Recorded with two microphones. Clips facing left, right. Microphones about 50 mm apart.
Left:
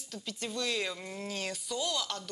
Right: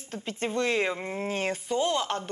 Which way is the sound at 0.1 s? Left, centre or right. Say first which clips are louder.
Right 8 dB; right.